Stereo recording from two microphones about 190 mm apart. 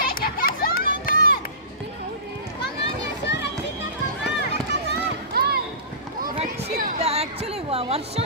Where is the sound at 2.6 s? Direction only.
65° left (ahead or behind).